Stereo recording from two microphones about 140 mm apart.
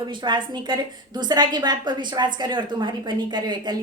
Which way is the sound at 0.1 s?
35° right (ahead or behind).